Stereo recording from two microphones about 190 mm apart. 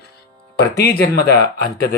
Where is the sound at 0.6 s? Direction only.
60° left (ahead or behind).